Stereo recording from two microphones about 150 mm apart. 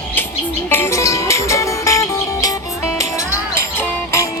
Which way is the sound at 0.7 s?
15° left (ahead or behind).